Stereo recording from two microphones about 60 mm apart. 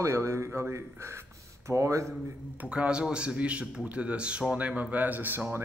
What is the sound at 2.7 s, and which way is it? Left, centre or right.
A man's voice, centre.